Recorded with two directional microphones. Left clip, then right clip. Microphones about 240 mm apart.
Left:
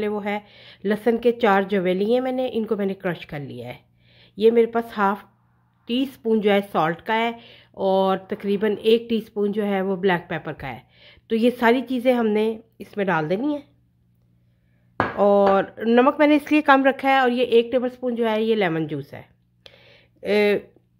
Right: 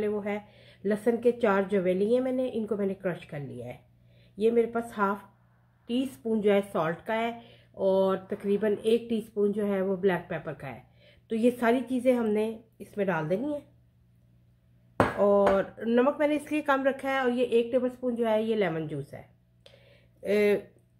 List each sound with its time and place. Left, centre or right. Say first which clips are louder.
0.0 s speech: left 5 dB; left
15.1 s a sound: left 7 dB; left
15.8 s speech: left 10 dB; left